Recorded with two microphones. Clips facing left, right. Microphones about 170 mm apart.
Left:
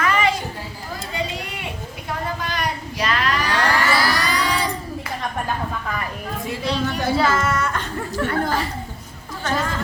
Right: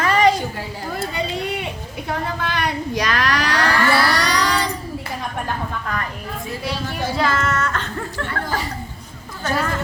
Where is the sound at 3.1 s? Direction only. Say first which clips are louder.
Left 1 dB; 80° right.